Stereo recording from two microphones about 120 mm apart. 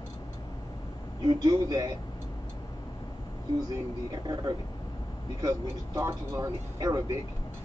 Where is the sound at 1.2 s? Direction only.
30° right (ahead or behind).